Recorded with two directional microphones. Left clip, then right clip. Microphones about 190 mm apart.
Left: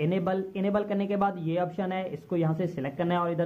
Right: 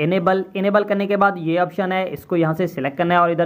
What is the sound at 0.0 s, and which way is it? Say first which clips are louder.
Speech: right 10 dB; 15° right (ahead or behind).